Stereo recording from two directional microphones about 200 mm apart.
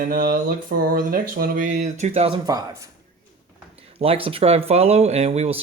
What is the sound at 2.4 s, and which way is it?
Speech, 15° right (ahead or behind).